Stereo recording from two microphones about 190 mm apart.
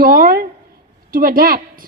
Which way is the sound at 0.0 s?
50° right (ahead or behind).